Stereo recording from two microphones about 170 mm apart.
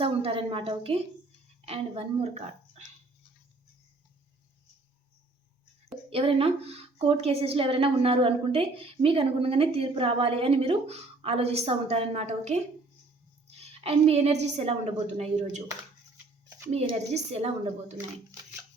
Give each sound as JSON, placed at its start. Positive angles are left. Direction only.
{"t": 0.0, "sound": "a woman's voice", "side_deg": -35}
{"t": 6.1, "sound": "a woman's voice", "side_deg": -35}
{"t": 16.7, "sound": "a woman's voice", "side_deg": -40}